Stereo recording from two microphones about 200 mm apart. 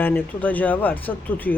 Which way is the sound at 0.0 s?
10° left (ahead or behind).